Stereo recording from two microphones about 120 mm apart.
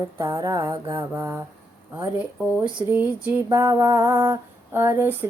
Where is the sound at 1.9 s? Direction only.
15° right (ahead or behind).